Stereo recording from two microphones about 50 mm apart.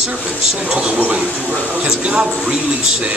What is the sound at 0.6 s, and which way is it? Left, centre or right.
Speech, centre.